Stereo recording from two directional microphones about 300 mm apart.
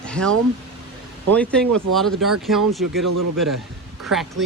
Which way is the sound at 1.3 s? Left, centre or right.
Centre.